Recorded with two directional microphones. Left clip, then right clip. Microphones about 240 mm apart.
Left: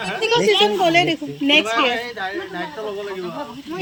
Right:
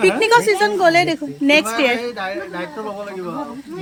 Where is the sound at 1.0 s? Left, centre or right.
Right.